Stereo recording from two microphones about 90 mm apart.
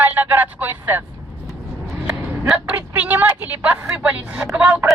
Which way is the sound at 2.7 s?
20° right (ahead or behind).